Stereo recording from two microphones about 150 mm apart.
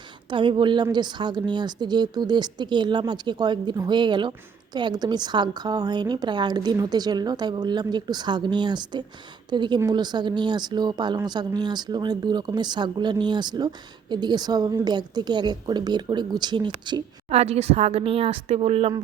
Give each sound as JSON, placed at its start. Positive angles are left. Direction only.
{"t": 0.3, "sound": "a woman's voice", "side_deg": -30}
{"t": 17.2, "sound": "a woman's voice", "side_deg": -45}